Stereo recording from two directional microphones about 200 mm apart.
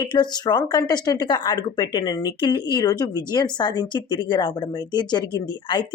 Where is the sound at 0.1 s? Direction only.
20° left (ahead or behind).